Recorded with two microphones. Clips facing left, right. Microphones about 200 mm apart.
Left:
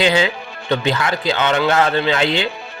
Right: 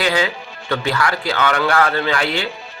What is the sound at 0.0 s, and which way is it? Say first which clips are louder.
A man's voice: left 3 dB; 25° left (ahead or behind).